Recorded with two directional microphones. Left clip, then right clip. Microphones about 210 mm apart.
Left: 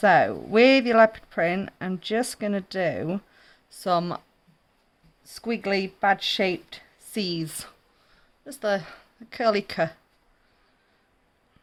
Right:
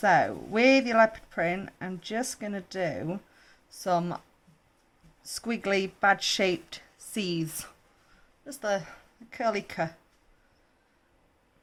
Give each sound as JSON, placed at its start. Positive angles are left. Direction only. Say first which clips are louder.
{"t": 0.0, "sound": "speech", "louder": "left 4 dB", "side_deg": 20}
{"t": 5.2, "sound": "speech", "louder": "left 3 dB", "side_deg": 10}
{"t": 8.4, "sound": "speech", "louder": "left 4 dB", "side_deg": 25}